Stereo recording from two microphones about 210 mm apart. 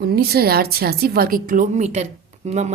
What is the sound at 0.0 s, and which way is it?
A woman's voice, 45° right (ahead or behind).